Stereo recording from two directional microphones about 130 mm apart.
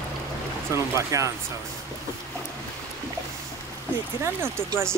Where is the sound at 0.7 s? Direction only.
25° right (ahead or behind).